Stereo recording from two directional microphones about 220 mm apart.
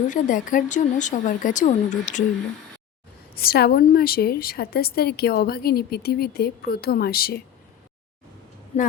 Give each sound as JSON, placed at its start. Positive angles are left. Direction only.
{"t": 0.1, "sound": "speech", "side_deg": 35}
{"t": 3.3, "sound": "a woman's voice", "side_deg": 45}
{"t": 8.7, "sound": "speech", "side_deg": 30}